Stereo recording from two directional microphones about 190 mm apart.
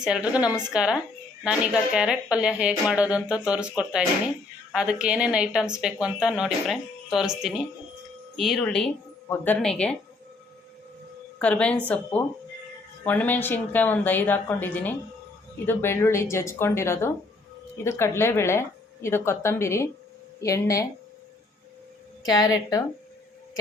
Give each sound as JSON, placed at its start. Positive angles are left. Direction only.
{"t": 0.0, "sound": "speech", "side_deg": -5}
{"t": 11.3, "sound": "a woman's voice", "side_deg": 5}
{"t": 13.1, "sound": "a woman's voice", "side_deg": 10}
{"t": 22.2, "sound": "a woman's voice", "side_deg": 20}